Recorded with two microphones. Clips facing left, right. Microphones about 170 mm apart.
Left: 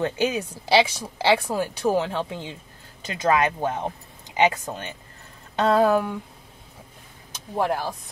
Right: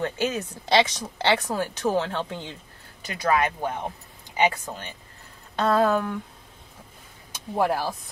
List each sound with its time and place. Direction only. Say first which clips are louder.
0.0 s speech: left 3 dB; 20° left (ahead or behind)
3.0 s speech: left 2 dB; 20° left (ahead or behind)
7.3 s speech: right 1 dB; 5° right (ahead or behind)